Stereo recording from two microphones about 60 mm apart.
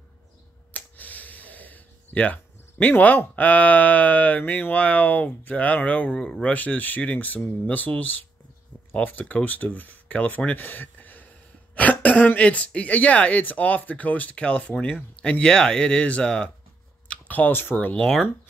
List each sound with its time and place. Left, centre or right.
0.7 s speech: left
6.1 s speech: centre
6.5 s speech: left
17.9 s speech: centre